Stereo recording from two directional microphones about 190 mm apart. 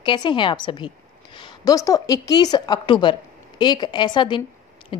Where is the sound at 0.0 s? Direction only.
25° left (ahead or behind).